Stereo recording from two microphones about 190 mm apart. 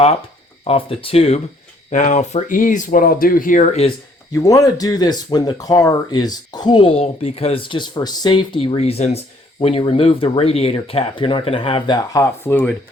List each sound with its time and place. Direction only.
0.7 s speech: 30° left (ahead or behind)
4.3 s speech: 15° left (ahead or behind)